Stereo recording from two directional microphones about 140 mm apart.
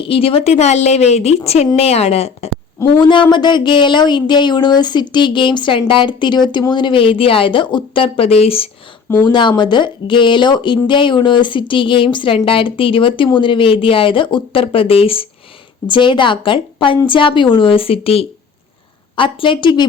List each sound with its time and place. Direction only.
0.0 s a woman's voice: 40° left (ahead or behind)
3.0 s speech: 35° left (ahead or behind)
9.2 s speech: 35° left (ahead or behind)